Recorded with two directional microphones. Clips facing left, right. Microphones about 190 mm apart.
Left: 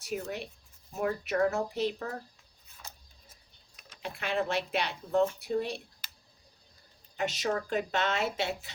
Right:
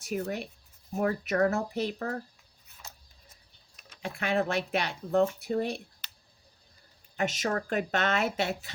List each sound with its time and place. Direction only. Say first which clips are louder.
0.0 s speech: right 3 dB; 50° right (ahead or behind)
4.0 s speech: right 3 dB; 50° right (ahead or behind)
7.2 s speech: right 1 dB; 50° right (ahead or behind)